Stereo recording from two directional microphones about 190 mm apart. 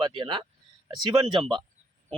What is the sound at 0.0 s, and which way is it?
Speech, 25° right (ahead or behind).